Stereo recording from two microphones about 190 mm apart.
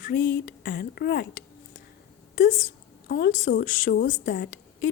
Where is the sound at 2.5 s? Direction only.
45° left (ahead or behind).